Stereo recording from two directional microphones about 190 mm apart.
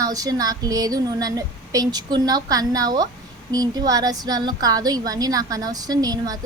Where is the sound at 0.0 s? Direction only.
20° right (ahead or behind).